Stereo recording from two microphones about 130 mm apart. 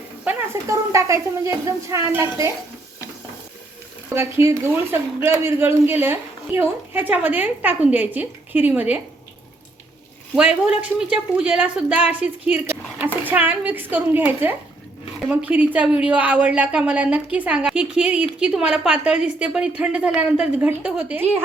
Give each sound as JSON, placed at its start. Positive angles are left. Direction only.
{"t": 0.3, "sound": "a woman's voice", "side_deg": -20}
{"t": 4.1, "sound": "a woman's voice", "side_deg": -20}
{"t": 10.3, "sound": "a woman's voice", "side_deg": -10}